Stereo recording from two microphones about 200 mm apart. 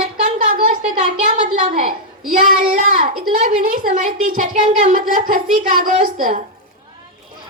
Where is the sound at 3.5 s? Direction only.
40° right (ahead or behind).